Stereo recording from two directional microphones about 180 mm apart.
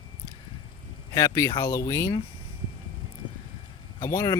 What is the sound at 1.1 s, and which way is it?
Speech, 15° left (ahead or behind).